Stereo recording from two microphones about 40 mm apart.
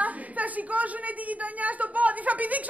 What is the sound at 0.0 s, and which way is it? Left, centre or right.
A woman's voice, right.